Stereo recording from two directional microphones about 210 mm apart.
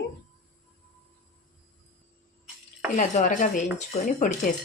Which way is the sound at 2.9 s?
35° left (ahead or behind).